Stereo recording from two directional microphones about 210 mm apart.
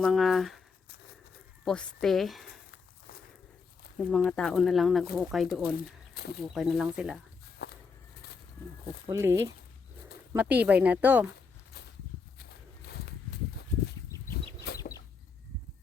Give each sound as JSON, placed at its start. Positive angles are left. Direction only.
{"t": 0.0, "sound": "speech", "side_deg": 0}
{"t": 1.6, "sound": "speech", "side_deg": 0}
{"t": 3.9, "sound": "speech", "side_deg": 5}
{"t": 7.6, "sound": "a sound", "side_deg": 50}
{"t": 9.0, "sound": "speech", "side_deg": -15}
{"t": 12.4, "sound": "walk", "side_deg": 50}
{"t": 14.7, "sound": "chicken", "side_deg": 50}